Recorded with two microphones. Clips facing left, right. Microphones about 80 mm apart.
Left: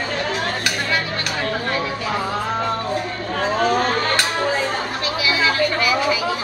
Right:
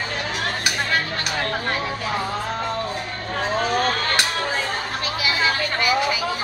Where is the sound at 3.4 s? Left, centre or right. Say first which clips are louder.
Left 3 dB; centre.